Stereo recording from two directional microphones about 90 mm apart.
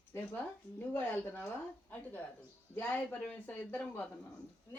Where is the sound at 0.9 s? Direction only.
20° left (ahead or behind).